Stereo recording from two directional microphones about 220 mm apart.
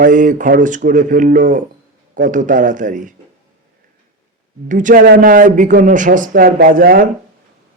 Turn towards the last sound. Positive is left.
turn(degrees=-40)  # may be behind; listen again after turning